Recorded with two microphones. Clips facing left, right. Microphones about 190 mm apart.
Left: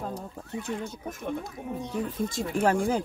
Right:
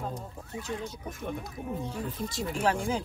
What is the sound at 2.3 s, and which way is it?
Speech, 50° left (ahead or behind).